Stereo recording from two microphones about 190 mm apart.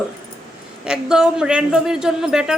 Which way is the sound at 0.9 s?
5° right (ahead or behind).